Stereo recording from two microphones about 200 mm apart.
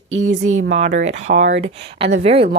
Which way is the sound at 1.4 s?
60° right (ahead or behind).